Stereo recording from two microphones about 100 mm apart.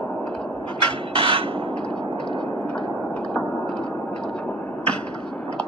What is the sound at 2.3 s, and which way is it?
Vehicle, 60° left (ahead or behind).